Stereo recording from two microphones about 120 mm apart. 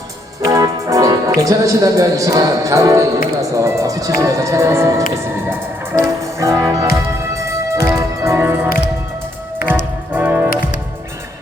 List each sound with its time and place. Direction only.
0.4 s speech: 25° right (ahead or behind)
5.5 s music: 20° right (ahead or behind)
10.1 s music: 15° right (ahead or behind)